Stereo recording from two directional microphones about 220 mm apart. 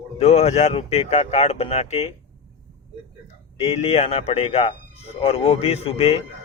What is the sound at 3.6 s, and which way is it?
Speech, 30° left (ahead or behind).